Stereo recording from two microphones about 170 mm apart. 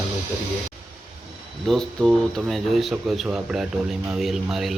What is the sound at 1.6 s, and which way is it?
Speech, centre (ahead or behind).